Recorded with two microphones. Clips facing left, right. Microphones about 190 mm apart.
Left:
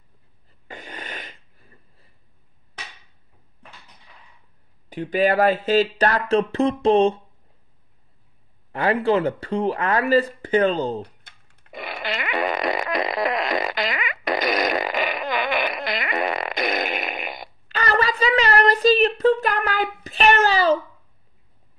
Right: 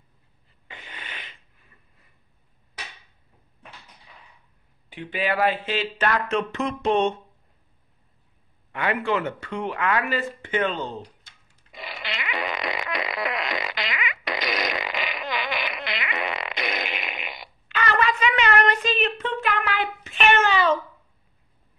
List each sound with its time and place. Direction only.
0.5 s sneeze: 40° left (ahead or behind)
4.8 s speech: 40° left (ahead or behind)
8.7 s speech: 35° left (ahead or behind)
11.0 s fart: 60° left (ahead or behind); by 20.8 s 35° left (ahead or behind)